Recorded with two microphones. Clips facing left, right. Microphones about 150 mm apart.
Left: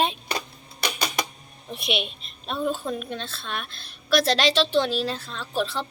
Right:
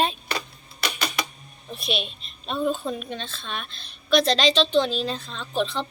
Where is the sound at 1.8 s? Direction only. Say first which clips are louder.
Left 1 dB; 65° left (ahead or behind).